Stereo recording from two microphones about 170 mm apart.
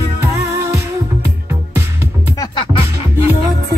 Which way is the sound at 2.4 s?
30° left (ahead or behind).